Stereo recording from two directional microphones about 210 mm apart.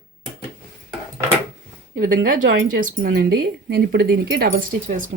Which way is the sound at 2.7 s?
45° right (ahead or behind).